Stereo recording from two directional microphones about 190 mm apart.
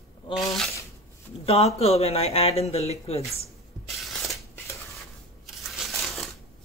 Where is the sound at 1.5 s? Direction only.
30° left (ahead or behind).